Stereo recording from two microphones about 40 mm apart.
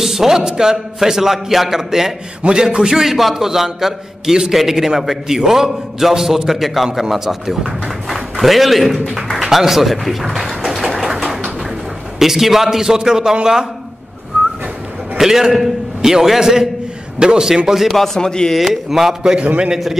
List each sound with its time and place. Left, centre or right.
0.0 s a man's voice: centre
3.0 s a man's voice: centre
9.1 s music: centre
12.2 s a man's voice: centre
15.1 s a man's voice: centre
17.8 s a man's voice: centre
18.5 s a man's voice: centre